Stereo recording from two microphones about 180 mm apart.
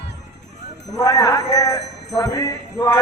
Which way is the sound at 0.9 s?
20° left (ahead or behind).